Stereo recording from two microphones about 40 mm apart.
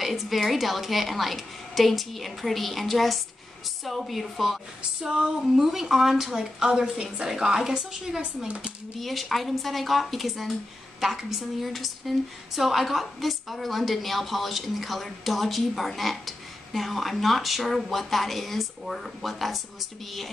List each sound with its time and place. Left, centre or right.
0.0 s a woman's voice: centre
5.6 s a woman's voice: centre
8.5 s speech: right
9.0 s a woman's voice: centre